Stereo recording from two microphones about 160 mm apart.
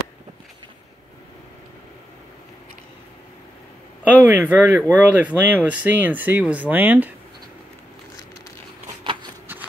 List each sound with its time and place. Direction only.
4.0 s speech: 10° right (ahead or behind)
9.0 s shuffling cards: 30° right (ahead or behind)